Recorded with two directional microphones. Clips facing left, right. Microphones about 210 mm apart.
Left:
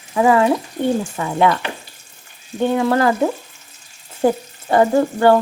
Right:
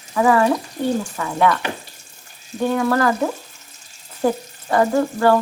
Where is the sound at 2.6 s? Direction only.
25° left (ahead or behind).